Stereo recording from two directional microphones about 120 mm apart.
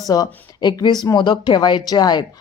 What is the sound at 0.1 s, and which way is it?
Speech, 35° left (ahead or behind).